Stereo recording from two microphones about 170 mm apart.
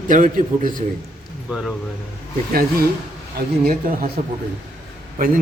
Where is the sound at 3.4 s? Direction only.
55° right (ahead or behind).